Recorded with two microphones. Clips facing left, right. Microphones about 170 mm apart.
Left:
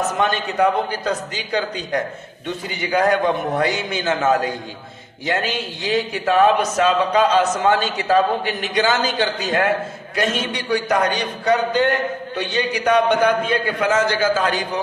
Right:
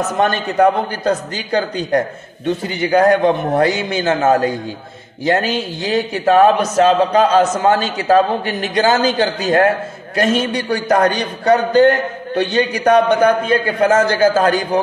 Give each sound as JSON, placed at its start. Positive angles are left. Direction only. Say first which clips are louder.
{"t": 0.2, "sound": "a man's voice", "louder": "right 6 dB", "side_deg": -45}